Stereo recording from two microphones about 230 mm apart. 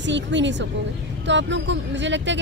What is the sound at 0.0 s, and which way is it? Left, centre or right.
Speech, right.